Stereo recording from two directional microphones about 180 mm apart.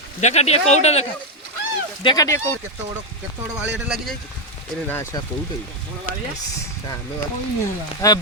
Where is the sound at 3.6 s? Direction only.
5° right (ahead or behind).